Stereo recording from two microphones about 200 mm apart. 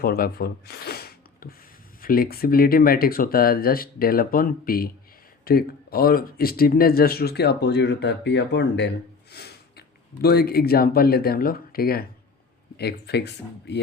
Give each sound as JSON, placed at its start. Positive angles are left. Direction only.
{"t": 0.0, "sound": "speech", "side_deg": 50}